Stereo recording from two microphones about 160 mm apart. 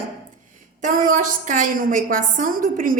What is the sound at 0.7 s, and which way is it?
A woman's voice, 55° right (ahead or behind).